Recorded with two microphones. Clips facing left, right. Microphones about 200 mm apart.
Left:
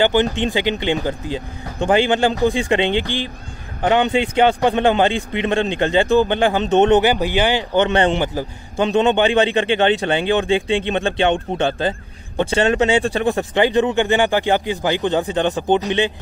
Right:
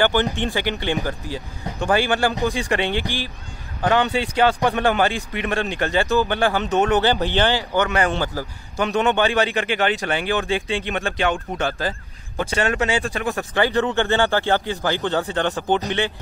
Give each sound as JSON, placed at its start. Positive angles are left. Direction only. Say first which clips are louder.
{"t": 0.0, "sound": "a man's voice", "louder": "left 3 dB", "side_deg": 15}